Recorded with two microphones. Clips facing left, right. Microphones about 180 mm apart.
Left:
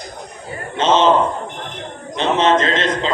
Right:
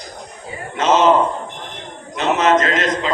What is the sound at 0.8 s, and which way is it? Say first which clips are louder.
Speech: even; 30° left (ahead or behind).